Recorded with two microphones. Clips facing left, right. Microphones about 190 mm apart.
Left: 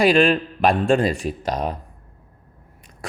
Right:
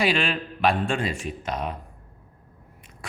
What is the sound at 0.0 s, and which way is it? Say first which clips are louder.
A man's voice: left 8 dB; 45° left (ahead or behind).